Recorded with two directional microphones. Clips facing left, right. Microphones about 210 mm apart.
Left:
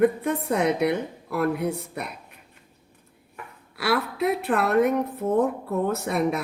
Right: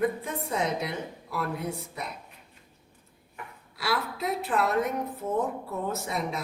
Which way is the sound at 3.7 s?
60° left (ahead or behind).